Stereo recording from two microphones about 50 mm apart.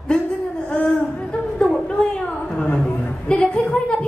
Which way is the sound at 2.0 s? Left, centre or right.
Centre.